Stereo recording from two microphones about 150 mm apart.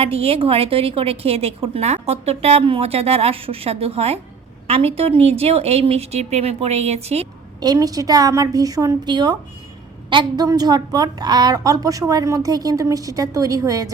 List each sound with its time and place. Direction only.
0.0 s a woman's voice: 40° right (ahead or behind)
7.6 s a woman's voice: 25° right (ahead or behind)